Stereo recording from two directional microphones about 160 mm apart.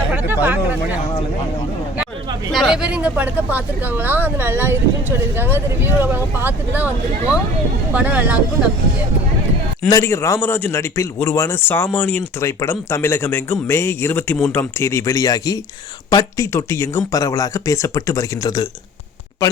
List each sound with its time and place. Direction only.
0.1 s speech: 10° right (ahead or behind)
2.5 s speech: centre (ahead or behind)
9.9 s speech: 15° left (ahead or behind)